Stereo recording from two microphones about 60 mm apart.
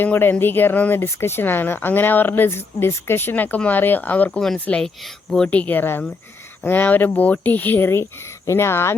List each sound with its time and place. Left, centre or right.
0.0 s speech: left
1.0 s speech: left
4.8 s speech: centre
5.5 s speech: left
8.4 s speech: left